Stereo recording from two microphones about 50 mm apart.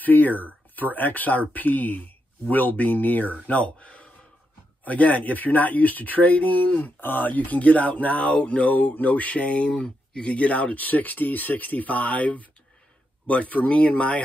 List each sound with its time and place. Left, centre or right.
0.0 s speech: left
3.4 s speech: left
9.8 s speech: centre
10.2 s speech: left